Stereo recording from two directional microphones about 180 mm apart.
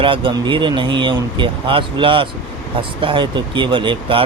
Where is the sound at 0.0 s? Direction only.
30° right (ahead or behind).